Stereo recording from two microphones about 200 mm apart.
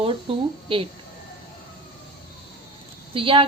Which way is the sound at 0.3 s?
25° right (ahead or behind).